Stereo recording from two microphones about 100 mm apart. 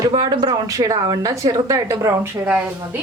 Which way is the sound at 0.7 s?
40° right (ahead or behind).